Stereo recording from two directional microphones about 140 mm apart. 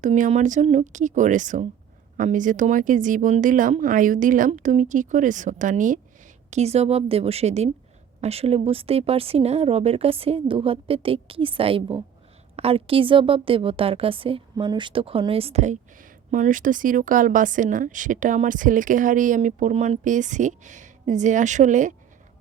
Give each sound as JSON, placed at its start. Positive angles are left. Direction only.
{"t": 0.0, "sound": "speech", "side_deg": -60}
{"t": 6.5, "sound": "a woman's voice", "side_deg": -50}